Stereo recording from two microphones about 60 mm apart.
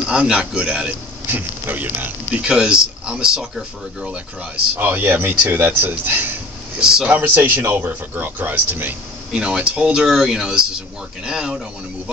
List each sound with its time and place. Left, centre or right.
0.0 s speech: centre
1.3 s speech: right
2.4 s speech: centre
4.7 s speech: right
6.8 s speech: centre
7.1 s speech: right
9.3 s speech: centre
10.0 s speech: centre